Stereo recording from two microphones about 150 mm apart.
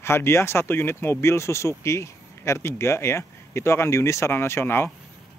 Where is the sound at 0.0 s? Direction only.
15° left (ahead or behind).